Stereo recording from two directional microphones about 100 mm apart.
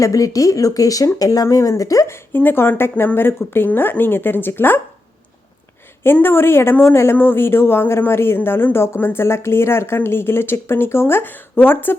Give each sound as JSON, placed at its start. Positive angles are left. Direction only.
{"t": 0.0, "sound": "speech", "side_deg": 35}
{"t": 6.1, "sound": "speech", "side_deg": 20}